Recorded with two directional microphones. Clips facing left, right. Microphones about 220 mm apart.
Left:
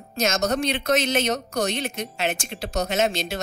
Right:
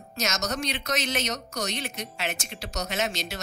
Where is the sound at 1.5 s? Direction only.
55° left (ahead or behind).